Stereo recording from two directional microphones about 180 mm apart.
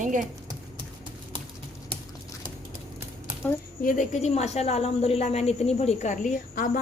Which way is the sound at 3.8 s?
45° left (ahead or behind).